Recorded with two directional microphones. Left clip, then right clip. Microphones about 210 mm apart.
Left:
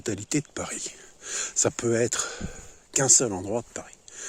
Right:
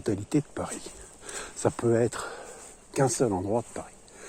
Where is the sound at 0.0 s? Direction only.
35° left (ahead or behind).